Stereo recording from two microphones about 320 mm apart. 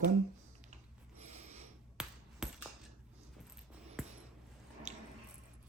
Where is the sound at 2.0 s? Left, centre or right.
Centre.